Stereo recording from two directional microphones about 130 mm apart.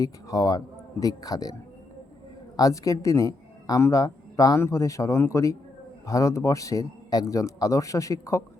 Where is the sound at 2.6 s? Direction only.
25° left (ahead or behind).